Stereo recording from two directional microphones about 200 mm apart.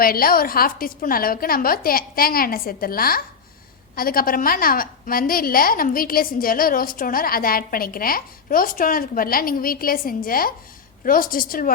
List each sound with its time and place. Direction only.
0.0 s a woman's voice: 45° left (ahead or behind)